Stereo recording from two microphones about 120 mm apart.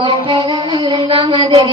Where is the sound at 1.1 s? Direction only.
45° right (ahead or behind).